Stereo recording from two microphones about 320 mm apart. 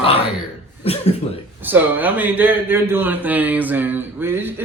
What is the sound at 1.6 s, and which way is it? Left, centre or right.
A man's voice, centre.